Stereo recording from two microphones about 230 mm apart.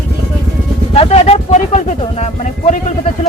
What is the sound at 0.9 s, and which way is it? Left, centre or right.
Speech, left.